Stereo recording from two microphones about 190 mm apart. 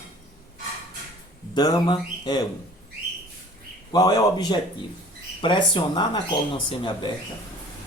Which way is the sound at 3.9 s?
20° left (ahead or behind).